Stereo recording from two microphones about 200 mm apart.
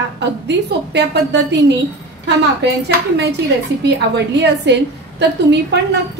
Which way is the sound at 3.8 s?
60° right (ahead or behind).